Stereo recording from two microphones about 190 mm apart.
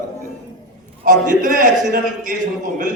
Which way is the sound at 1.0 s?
45° right (ahead or behind).